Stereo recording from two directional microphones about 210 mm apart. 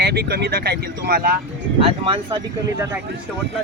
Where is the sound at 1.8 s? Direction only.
25° right (ahead or behind).